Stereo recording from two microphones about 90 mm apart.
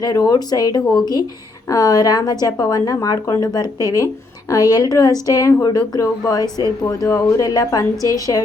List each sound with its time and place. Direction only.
0.0 s a woman's voice: 40° left (ahead or behind)